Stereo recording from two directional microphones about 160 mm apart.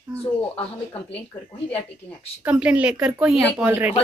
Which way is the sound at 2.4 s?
5° right (ahead or behind).